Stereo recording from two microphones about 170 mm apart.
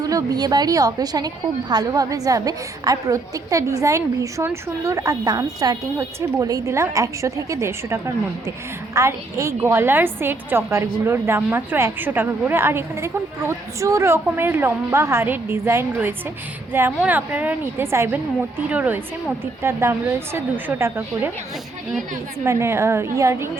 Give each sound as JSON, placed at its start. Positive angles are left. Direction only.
{"t": 0.0, "sound": "a woman's voice", "side_deg": -20}
{"t": 22.4, "sound": "a woman's voice", "side_deg": -15}